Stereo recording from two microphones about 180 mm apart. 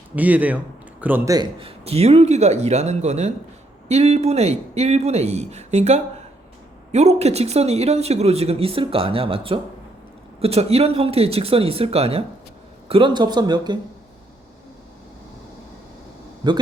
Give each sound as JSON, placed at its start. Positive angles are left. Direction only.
{"t": 0.2, "sound": "a man's voice", "side_deg": -10}
{"t": 1.5, "sound": "speech", "side_deg": -30}
{"t": 16.4, "sound": "speech", "side_deg": -25}